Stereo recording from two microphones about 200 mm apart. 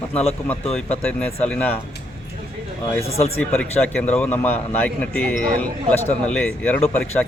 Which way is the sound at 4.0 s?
5° left (ahead or behind).